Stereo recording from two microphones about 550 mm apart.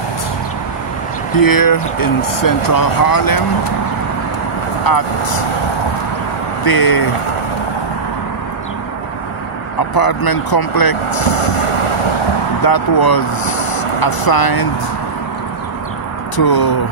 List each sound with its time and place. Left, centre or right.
1.3 s speech: left
4.8 s speech: left
6.6 s speech: left
9.9 s speech: left
11.2 s vehicle: left
12.6 s speech: left
16.3 s speech: left